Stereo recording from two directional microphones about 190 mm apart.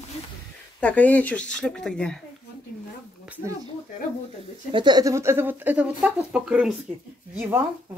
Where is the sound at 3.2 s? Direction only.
10° right (ahead or behind).